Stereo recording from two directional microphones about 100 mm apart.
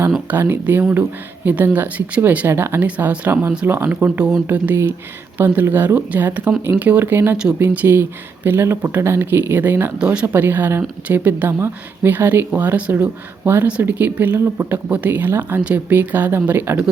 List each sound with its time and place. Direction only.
0.3 s speech: 20° right (ahead or behind)
2.8 s speech: 15° right (ahead or behind)